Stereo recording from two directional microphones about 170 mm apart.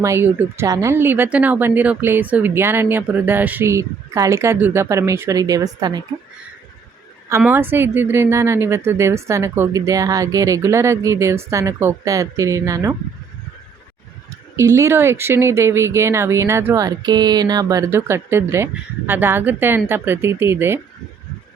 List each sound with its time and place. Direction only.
0.0 s speech: 15° right (ahead or behind)
7.3 s speech: 15° right (ahead or behind)
14.5 s speech: 15° right (ahead or behind)